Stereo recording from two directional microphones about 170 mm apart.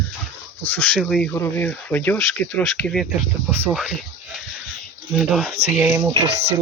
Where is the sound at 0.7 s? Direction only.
10° left (ahead or behind).